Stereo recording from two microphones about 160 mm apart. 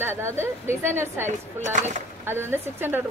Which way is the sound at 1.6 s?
50° right (ahead or behind).